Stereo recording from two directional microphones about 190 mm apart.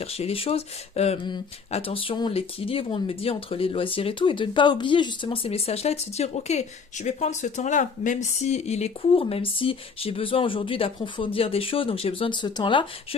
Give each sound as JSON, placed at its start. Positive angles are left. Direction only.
{"t": 0.0, "sound": "speech", "side_deg": 30}